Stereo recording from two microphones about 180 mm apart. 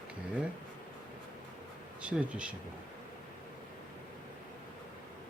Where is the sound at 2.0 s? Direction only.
5° right (ahead or behind).